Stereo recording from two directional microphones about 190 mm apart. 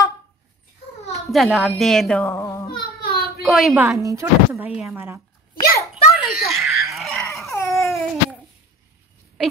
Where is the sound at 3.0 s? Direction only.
55° left (ahead or behind).